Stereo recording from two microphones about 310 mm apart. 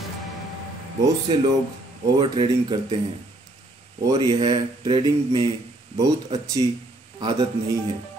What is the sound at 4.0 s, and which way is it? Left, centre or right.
A man's voice, centre.